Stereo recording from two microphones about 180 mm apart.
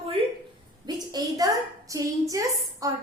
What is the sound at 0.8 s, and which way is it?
A woman's voice, 20° right (ahead or behind).